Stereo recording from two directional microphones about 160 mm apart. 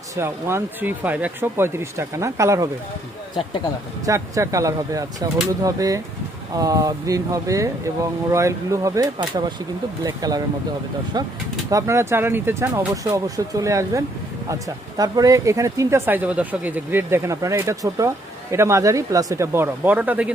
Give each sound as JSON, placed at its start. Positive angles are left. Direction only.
{"t": 0.2, "sound": "speech", "side_deg": -15}
{"t": 4.0, "sound": "speech", "side_deg": -20}
{"t": 11.7, "sound": "speech", "side_deg": -20}